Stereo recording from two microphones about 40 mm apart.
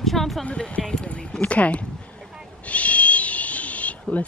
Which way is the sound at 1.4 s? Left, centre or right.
Left.